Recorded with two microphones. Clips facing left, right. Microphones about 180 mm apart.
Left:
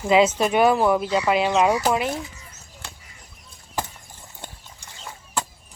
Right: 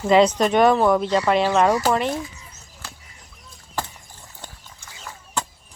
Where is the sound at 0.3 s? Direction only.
10° left (ahead or behind).